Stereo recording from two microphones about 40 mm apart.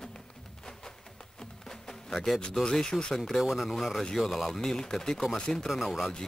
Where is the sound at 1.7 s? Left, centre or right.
Centre.